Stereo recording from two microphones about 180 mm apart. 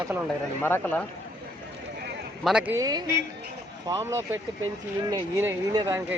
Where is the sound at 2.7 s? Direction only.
20° right (ahead or behind).